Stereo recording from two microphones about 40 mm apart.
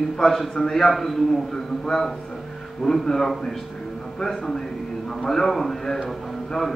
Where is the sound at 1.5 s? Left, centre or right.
Centre.